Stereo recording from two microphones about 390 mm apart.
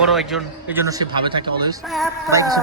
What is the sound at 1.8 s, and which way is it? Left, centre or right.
Speech, centre.